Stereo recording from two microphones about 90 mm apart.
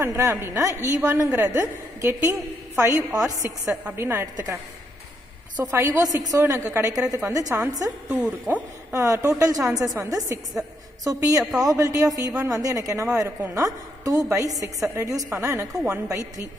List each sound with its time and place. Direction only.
0.0 s a woman's voice: 30° right (ahead or behind)
5.6 s a woman's voice: 30° right (ahead or behind)
8.5 s a woman's voice: 25° right (ahead or behind)